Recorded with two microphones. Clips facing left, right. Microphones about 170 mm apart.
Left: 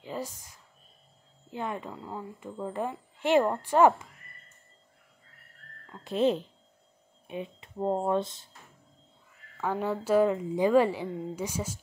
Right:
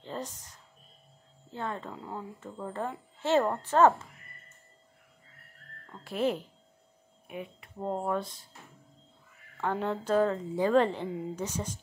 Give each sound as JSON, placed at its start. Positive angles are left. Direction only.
{"t": 0.0, "sound": "music", "side_deg": 10}
{"t": 1.5, "sound": "a woman's voice", "side_deg": 15}
{"t": 1.9, "sound": "speech", "side_deg": 0}
{"t": 2.4, "sound": "a woman's voice", "side_deg": 10}
{"t": 6.0, "sound": "speech", "side_deg": 20}
{"t": 9.6, "sound": "a woman's voice", "side_deg": 5}